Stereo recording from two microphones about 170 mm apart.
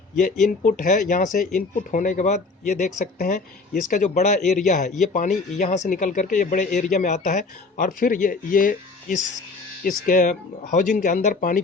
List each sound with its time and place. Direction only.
0.2 s speech: 50° left (ahead or behind)